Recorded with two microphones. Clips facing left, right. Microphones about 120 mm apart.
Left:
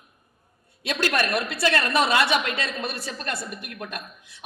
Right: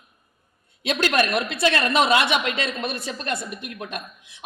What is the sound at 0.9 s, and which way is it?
A woman's voice, 20° right (ahead or behind).